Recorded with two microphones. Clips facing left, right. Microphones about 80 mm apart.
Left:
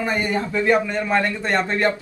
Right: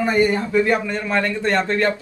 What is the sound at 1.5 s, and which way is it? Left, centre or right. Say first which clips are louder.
Speech: right 3 dB; centre.